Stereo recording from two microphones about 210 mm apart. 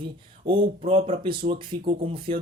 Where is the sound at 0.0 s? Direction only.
25° right (ahead or behind).